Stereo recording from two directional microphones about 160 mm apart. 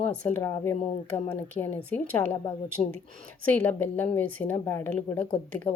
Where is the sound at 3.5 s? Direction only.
10° left (ahead or behind).